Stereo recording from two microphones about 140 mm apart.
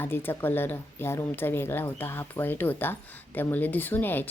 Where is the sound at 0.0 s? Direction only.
15° left (ahead or behind).